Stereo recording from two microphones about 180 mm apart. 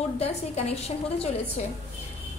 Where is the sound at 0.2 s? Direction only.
35° left (ahead or behind).